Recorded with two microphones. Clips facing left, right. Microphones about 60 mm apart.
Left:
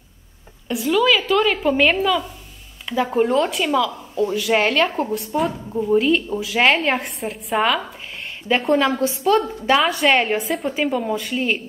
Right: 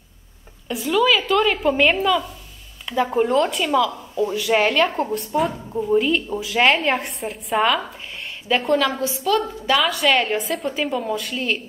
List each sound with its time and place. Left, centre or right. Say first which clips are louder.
0.7 s speech: left 1 dB; centre
9.0 s a woman's voice: left 3 dB; left
9.9 s speech: left 2 dB; centre